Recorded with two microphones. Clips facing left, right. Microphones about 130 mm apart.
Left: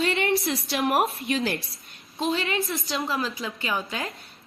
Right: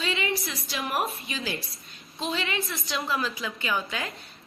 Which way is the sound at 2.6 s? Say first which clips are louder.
Left 2 dB; 30° left (ahead or behind).